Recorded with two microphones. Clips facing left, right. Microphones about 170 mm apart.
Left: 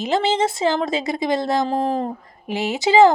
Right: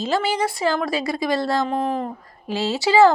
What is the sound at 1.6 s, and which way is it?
Speech, 35° left (ahead or behind).